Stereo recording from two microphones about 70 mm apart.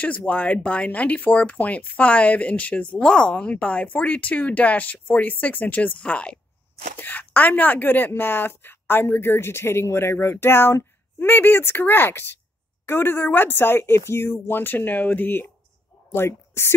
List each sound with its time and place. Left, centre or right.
0.0 s a woman's voice: left